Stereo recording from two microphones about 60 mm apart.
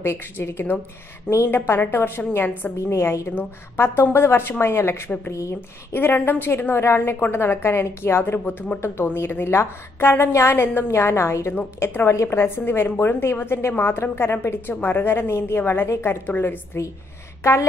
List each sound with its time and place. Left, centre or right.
0.0 s a woman's voice: left
2.9 s a woman's voice: left
5.3 s speech: left
6.1 s a woman's voice: left
10.9 s a woman's voice: left
16.8 s a woman's voice: left